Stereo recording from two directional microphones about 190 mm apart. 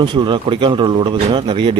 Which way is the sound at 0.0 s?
25° right (ahead or behind).